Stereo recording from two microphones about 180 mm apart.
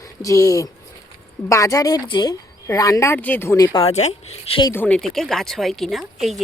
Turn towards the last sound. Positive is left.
turn(degrees=0)  # may be behind; listen again after turning